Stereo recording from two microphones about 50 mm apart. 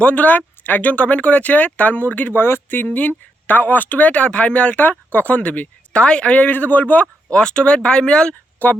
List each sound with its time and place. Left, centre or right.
0.0 s speech: left
2.4 s speech: left
2.9 s speech: left
4.8 s speech: left
5.2 s speech: left
7.3 s speech: centre
8.5 s speech: left